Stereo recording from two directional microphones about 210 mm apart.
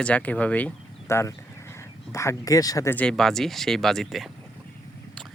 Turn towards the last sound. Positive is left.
turn(degrees=0)  # may be behind; listen again after turning